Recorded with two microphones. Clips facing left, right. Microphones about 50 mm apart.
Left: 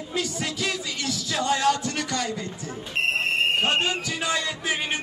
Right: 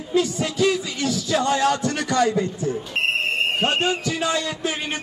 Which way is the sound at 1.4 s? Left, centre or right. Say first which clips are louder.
Right 1 dB; centre.